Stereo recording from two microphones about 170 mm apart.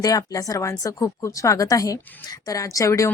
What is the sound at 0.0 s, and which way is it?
Speech, 20° left (ahead or behind).